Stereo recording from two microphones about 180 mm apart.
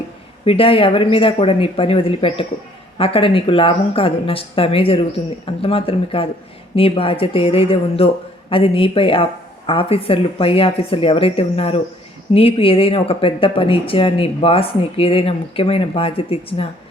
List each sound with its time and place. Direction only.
0.4 s speech: 30° left (ahead or behind)